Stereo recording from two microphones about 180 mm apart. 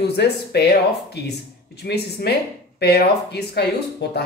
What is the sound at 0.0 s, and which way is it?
Speech, 65° left (ahead or behind).